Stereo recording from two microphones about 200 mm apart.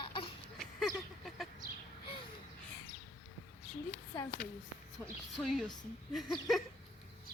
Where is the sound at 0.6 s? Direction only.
Centre (ahead or behind).